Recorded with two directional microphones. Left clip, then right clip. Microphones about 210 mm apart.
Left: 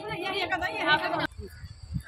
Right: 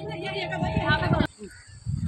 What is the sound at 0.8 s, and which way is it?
Speech, 30° left (ahead or behind).